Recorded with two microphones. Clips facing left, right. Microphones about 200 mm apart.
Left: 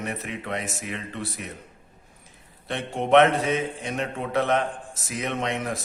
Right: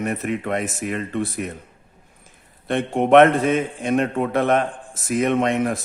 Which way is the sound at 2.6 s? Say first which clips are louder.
Right 8 dB; 55° right (ahead or behind).